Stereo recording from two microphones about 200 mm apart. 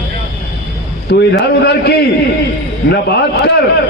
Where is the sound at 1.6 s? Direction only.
55° left (ahead or behind).